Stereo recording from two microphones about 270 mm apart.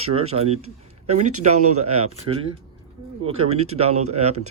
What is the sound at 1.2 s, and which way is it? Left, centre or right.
Speech, right.